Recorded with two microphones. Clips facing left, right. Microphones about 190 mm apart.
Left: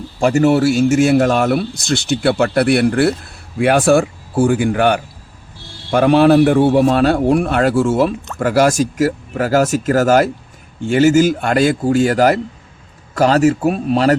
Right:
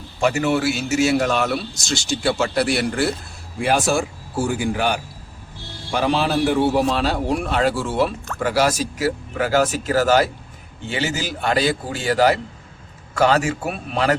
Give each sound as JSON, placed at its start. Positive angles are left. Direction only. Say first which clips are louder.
{"t": 0.2, "sound": "a man's voice", "louder": "left 7 dB", "side_deg": 40}